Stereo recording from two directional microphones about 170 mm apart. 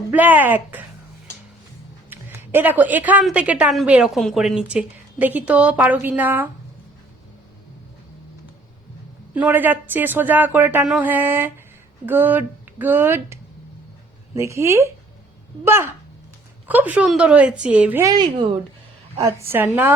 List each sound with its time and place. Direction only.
0.1 s a woman's voice: 10° right (ahead or behind)
2.0 s a woman's voice: 10° right (ahead or behind)
9.3 s a woman's voice: 10° right (ahead or behind)
18.0 s a woman's voice: 25° right (ahead or behind)
19.2 s a woman's voice: 15° right (ahead or behind)